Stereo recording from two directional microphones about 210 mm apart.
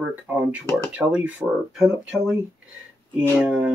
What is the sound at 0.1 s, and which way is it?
Speech, 10° right (ahead or behind).